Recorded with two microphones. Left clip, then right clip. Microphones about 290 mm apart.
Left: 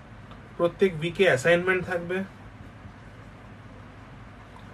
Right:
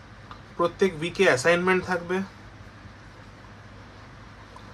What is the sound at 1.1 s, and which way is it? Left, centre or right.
Speech, right.